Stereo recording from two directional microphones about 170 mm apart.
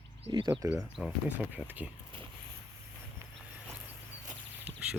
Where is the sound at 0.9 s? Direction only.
5° right (ahead or behind).